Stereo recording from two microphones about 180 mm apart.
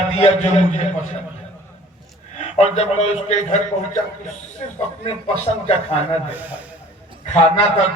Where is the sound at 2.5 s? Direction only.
35° left (ahead or behind).